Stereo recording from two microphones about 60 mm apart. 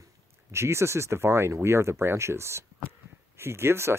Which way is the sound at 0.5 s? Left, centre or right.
Right.